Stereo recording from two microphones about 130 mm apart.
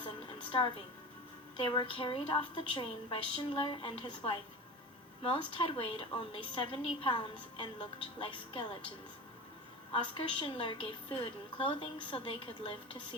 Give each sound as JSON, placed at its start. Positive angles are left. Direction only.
{"t": 1.5, "sound": "a woman's voice", "side_deg": 40}
{"t": 9.9, "sound": "a woman's voice", "side_deg": 40}